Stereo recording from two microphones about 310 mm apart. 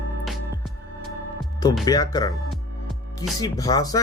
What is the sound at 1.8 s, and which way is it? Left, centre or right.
Speech, centre.